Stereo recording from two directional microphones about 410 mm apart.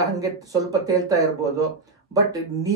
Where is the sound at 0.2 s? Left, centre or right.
Centre.